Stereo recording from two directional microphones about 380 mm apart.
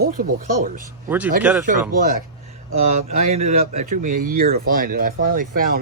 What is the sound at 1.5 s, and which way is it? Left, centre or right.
Speech, centre.